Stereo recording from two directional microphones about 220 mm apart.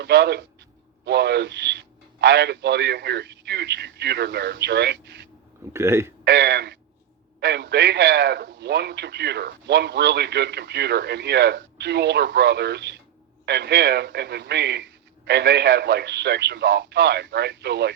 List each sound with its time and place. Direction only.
0.0 s a man's voice: 50° right (ahead or behind)
5.7 s a man's voice: 10° right (ahead or behind)
6.2 s a man's voice: 55° right (ahead or behind)